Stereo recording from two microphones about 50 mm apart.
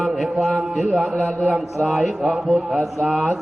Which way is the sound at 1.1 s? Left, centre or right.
Centre.